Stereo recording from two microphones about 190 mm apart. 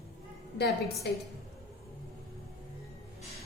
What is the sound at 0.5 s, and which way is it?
Speech, 55° left (ahead or behind).